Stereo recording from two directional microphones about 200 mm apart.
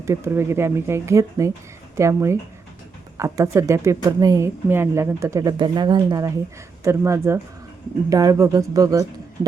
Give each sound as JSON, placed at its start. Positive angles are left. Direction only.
{"t": 0.0, "sound": "speech", "side_deg": -15}